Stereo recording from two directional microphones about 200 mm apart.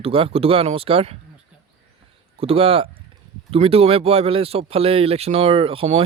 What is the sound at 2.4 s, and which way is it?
Speech, 30° right (ahead or behind).